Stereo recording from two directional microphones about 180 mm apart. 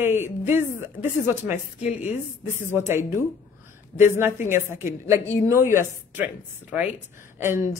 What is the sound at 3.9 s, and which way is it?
Speech, 10° right (ahead or behind).